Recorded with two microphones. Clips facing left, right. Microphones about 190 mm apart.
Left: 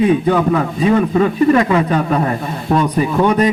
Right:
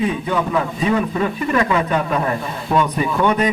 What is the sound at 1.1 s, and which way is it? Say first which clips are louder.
A man's voice: left 8 dB; 35° left (ahead or behind).